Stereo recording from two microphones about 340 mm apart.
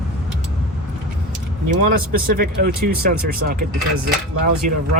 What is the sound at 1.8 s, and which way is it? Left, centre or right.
Speech, right.